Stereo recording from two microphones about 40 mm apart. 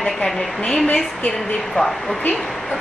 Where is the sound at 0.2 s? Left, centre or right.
Left.